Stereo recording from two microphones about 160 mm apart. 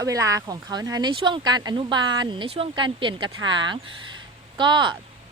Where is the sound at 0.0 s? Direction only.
20° right (ahead or behind).